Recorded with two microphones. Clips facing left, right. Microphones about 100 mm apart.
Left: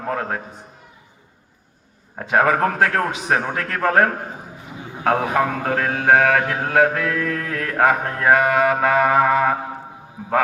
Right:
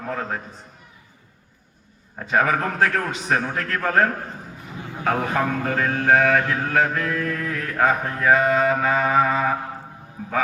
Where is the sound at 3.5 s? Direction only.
65° left (ahead or behind).